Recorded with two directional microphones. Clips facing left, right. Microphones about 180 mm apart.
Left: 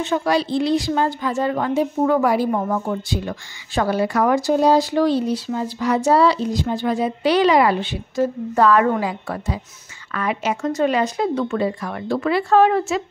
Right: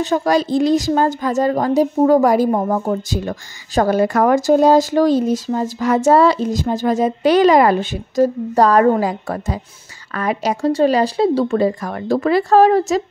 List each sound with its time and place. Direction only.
0.0 s a woman's voice: 40° right (ahead or behind)